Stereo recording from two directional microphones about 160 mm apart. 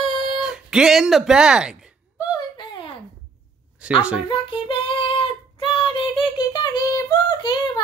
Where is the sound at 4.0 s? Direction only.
5° right (ahead or behind).